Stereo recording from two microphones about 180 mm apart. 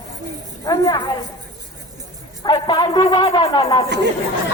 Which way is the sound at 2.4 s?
25° left (ahead or behind).